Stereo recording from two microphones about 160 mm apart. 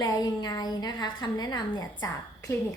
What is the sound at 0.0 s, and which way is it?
A woman's voice, 25° left (ahead or behind).